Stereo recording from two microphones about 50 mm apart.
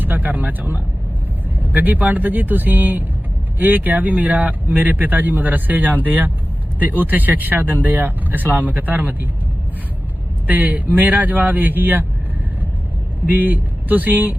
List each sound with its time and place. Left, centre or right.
0.0 s speech: right
10.4 s speech: right
13.2 s speech: right